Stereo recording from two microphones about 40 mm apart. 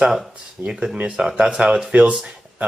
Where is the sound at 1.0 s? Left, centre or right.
Right.